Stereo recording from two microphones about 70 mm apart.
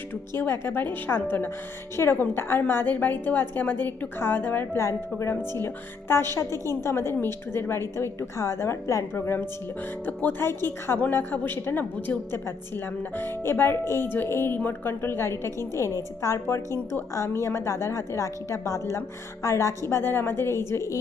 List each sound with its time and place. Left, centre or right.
0.1 s a woman's voice: left
4.8 s a woman's voice: left
9.1 s a woman's voice: left
19.9 s a woman's voice: left